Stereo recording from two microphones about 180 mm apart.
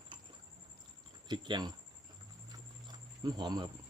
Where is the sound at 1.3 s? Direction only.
25° right (ahead or behind).